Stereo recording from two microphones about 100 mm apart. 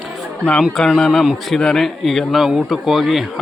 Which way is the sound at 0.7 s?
5° left (ahead or behind).